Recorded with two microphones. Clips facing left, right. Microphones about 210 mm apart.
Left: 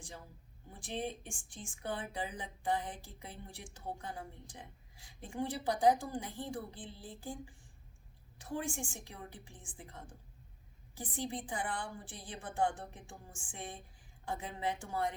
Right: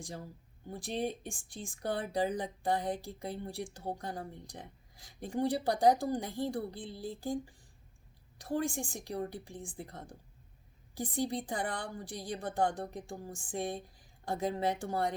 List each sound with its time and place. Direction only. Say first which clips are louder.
0.7 s speech: right 5 dB; 40° right (ahead or behind)
8.5 s speech: right 5 dB; 35° right (ahead or behind)
11.1 s speech: right 5 dB; 35° right (ahead or behind)